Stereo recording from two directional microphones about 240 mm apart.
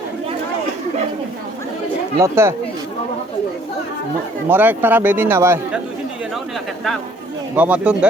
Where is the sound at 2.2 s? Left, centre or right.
Centre.